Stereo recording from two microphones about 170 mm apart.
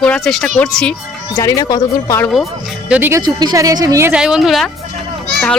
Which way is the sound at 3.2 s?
25° right (ahead or behind).